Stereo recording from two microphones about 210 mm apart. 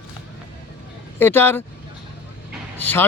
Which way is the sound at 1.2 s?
10° left (ahead or behind).